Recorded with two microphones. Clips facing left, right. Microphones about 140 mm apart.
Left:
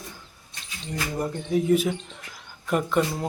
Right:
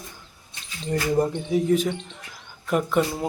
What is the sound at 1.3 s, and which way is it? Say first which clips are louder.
Speech: even; centre (ahead or behind).